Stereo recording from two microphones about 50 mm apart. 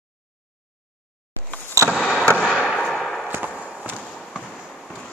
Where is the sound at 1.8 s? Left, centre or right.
Right.